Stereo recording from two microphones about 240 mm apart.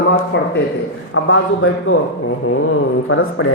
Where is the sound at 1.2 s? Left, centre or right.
Left.